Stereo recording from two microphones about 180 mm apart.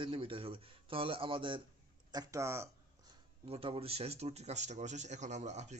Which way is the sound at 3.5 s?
30° right (ahead or behind).